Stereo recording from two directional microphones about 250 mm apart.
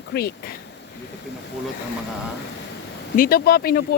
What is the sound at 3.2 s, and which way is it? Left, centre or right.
Speech, left.